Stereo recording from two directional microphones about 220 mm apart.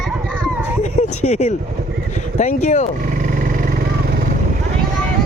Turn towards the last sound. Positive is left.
turn(degrees=-45)  # may be behind; listen again after turning